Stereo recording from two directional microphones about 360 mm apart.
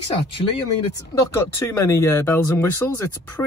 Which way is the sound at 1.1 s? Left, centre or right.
Centre.